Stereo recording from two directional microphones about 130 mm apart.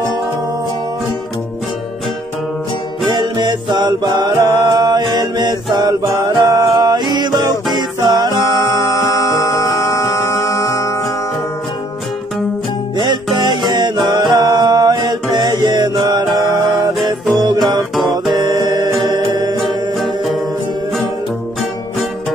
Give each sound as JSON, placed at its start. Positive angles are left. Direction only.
{"t": 3.1, "sound": "music", "side_deg": -35}
{"t": 8.5, "sound": "music", "side_deg": 25}
{"t": 12.9, "sound": "music", "side_deg": -35}
{"t": 18.3, "sound": "music", "side_deg": -30}